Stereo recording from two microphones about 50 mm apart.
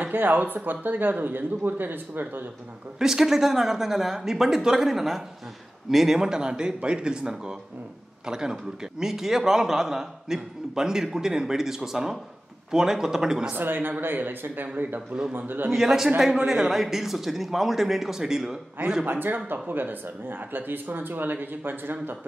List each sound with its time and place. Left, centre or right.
0.1 s speech: right
3.0 s a man's voice: centre
13.5 s speech: right
15.7 s speech: centre
19.0 s speech: right